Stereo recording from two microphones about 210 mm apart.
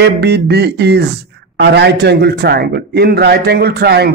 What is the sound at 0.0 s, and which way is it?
A man's voice, 50° right (ahead or behind).